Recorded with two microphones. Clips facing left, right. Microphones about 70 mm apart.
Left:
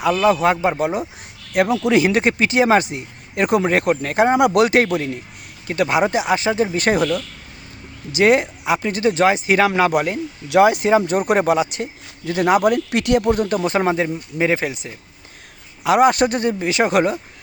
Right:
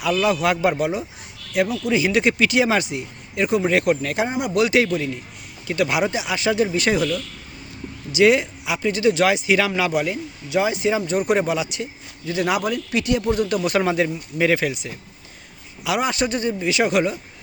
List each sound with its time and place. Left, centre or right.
0.0 s speech: left
0.8 s speech: left
1.5 s speech: left
2.0 s speech: left
3.7 s speech: left
4.3 s speech: left
4.6 s speech: left
10.5 s speech: left
13.5 s speech: left
13.7 s speech: left
15.8 s speech: left
16.6 s speech: left